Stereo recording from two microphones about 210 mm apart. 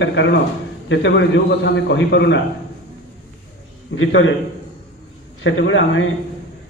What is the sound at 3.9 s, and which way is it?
Speech, 65° left (ahead or behind).